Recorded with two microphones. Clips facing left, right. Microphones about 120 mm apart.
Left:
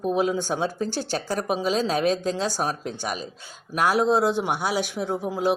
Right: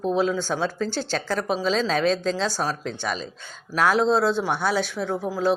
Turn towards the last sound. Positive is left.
turn(degrees=20)  # may be behind; listen again after turning